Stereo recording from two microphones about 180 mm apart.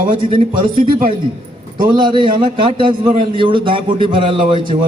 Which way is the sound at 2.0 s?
25° right (ahead or behind).